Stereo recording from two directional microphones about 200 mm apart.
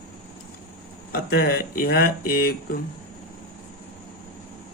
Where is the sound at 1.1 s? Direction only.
50° left (ahead or behind).